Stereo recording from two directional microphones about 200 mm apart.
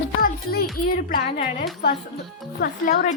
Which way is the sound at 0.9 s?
45° left (ahead or behind).